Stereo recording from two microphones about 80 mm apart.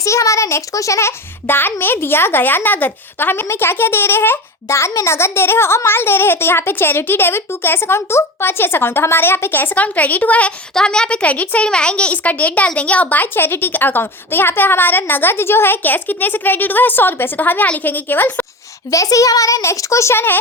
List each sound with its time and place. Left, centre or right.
0.0 s a child's voice: left
18.9 s a child's voice: left